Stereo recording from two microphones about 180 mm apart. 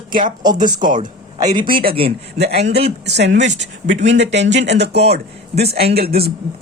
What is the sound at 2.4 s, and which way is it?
A man's voice, 65° right (ahead or behind).